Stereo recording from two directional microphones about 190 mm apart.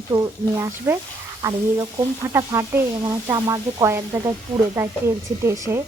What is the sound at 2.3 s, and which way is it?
Speech, 15° right (ahead or behind).